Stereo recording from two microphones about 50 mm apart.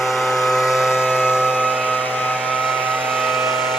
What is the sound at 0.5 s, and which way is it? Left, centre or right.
Vehicle, centre.